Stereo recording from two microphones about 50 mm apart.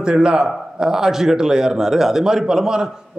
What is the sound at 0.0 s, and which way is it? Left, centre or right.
A man's voice, centre.